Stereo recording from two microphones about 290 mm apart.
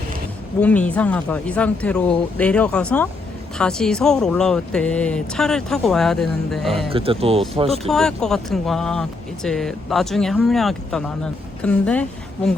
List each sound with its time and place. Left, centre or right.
0.6 s speech: centre
6.9 s speech: centre
7.9 s speech: centre